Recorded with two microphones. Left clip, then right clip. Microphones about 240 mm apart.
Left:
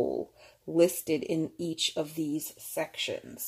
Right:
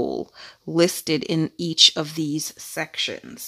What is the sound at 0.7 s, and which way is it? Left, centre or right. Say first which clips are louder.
Speech: right 5 dB; right.